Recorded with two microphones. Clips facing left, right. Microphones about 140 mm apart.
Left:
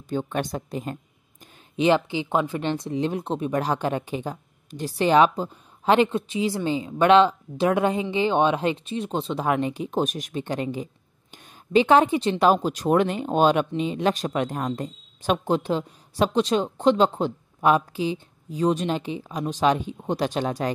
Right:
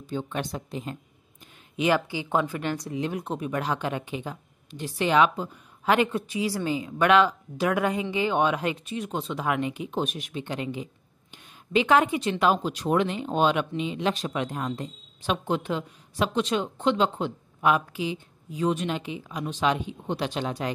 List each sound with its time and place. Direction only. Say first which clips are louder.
0.0 s a woman's voice: left 4 dB; 50° left (ahead or behind)
1.8 s speech: left 4 dB; 25° left (ahead or behind); by 20.7 s 40° left (ahead or behind)